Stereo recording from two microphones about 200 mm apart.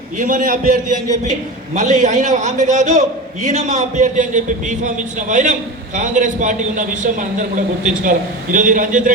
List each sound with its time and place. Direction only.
0.2 s a man's voice: 40° right (ahead or behind)